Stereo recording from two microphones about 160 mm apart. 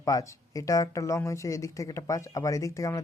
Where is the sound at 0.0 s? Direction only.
20° left (ahead or behind).